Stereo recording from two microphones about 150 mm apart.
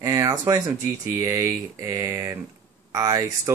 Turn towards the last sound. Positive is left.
turn(degrees=-25)  # may be behind; listen again after turning